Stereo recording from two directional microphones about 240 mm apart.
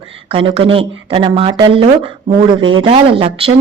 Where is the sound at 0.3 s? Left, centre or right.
Right.